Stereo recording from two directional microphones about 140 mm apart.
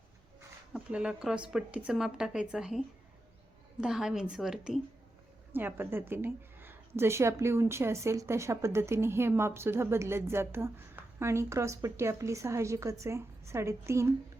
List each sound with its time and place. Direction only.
0.7 s a woman's voice: 5° right (ahead or behind)
5.5 s a woman's voice: 15° right (ahead or behind)